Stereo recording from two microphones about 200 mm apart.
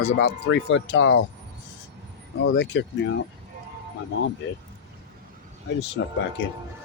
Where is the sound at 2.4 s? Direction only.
60° left (ahead or behind).